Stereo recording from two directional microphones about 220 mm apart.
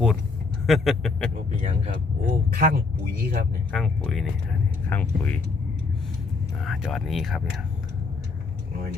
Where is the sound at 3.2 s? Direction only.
40° right (ahead or behind).